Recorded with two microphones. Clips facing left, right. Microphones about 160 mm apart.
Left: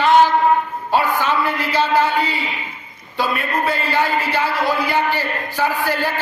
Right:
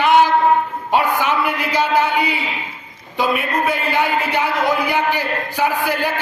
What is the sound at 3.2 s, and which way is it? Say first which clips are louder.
A man's voice: right 2 dB; 15° right (ahead or behind).